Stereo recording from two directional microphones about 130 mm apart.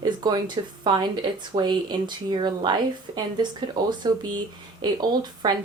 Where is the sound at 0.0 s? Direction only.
30° right (ahead or behind).